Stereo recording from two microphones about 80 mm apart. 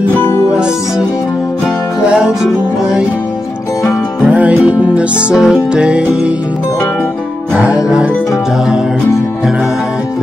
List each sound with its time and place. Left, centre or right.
0.2 s music: left
2.1 s music: centre
4.3 s music: centre
7.5 s music: centre